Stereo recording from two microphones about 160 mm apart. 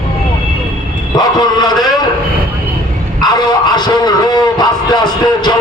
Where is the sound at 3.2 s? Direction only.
25° left (ahead or behind).